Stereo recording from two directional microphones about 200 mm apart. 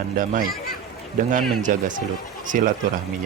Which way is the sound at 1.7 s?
40° right (ahead or behind).